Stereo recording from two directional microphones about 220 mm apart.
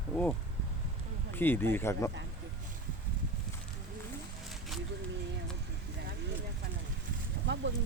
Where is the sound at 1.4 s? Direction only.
10° left (ahead or behind).